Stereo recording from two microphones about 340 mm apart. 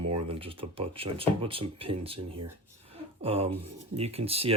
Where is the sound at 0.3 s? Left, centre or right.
Centre.